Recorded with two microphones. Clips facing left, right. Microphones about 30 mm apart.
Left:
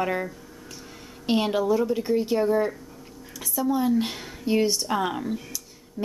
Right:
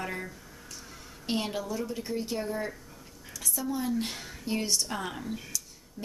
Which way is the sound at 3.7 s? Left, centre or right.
Centre.